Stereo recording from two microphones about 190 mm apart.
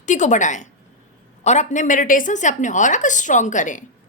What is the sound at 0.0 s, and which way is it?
A woman's voice, 40° left (ahead or behind).